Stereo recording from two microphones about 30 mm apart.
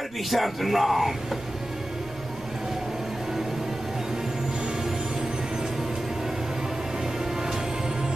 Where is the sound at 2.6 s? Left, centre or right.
Centre.